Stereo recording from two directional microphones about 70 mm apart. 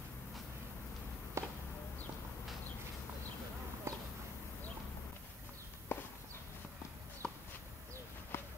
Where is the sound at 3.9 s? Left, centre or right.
Right.